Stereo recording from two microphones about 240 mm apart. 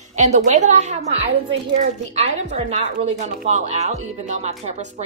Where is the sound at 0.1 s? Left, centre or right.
Right.